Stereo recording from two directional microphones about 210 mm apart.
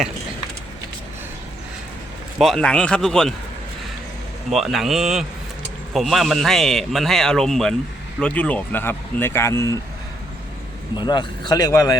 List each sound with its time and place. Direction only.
2.4 s a man's voice: centre (ahead or behind)
4.5 s a man's voice: centre (ahead or behind); by 9.7 s 15° left (ahead or behind)
10.9 s speech: 20° left (ahead or behind)